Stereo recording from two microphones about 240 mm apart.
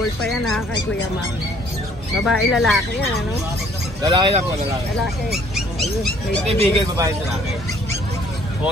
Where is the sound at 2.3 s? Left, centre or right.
Centre.